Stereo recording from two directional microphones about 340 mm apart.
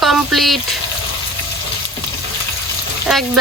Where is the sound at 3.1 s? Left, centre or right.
Centre.